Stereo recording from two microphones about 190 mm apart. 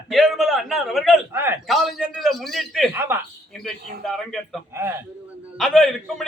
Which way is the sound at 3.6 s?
Centre (ahead or behind).